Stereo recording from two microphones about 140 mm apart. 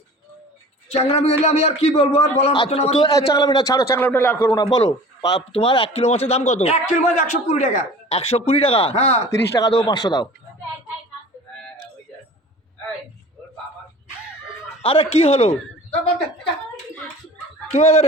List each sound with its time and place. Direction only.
0.9 s a man's voice: 45° left (ahead or behind)
3.0 s a man's voice: 25° left (ahead or behind); by 9.3 s 50° left (ahead or behind)
9.3 s a man's voice: 25° left (ahead or behind)
14.8 s speech: 40° left (ahead or behind)
17.7 s a man's voice: 50° left (ahead or behind)